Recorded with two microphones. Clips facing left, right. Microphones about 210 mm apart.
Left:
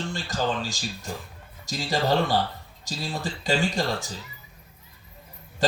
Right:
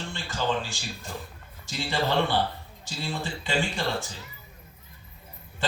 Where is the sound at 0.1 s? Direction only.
40° left (ahead or behind).